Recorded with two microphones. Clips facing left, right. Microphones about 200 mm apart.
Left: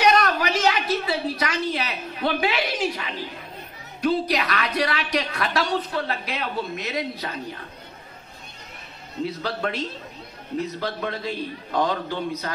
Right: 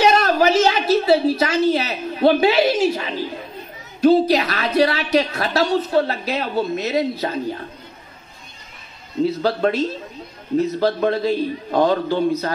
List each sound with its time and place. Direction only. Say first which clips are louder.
0.0 s a sound: right 3 dB; 25° right (ahead or behind)
0.4 s a woman's voice: right 7 dB; 25° right (ahead or behind)
9.2 s a woman's voice: right 9 dB; 30° right (ahead or behind)